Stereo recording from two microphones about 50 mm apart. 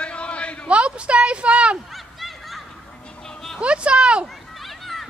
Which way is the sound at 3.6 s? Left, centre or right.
Right.